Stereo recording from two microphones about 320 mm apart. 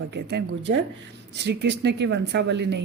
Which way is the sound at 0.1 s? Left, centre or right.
Right.